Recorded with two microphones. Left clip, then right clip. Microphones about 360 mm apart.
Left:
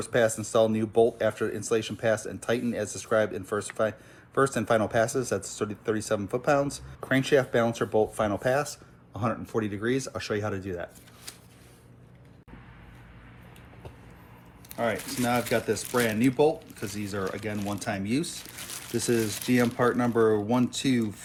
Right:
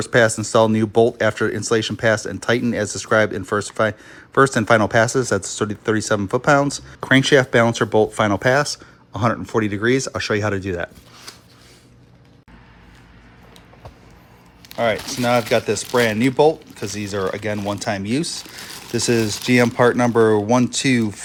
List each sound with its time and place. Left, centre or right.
0.0 s speech: right
14.7 s speech: centre